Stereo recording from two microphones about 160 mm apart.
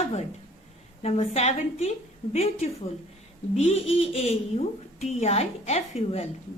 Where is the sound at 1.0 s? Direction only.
40° left (ahead or behind).